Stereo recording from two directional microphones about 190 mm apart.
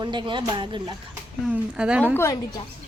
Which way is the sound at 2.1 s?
15° left (ahead or behind).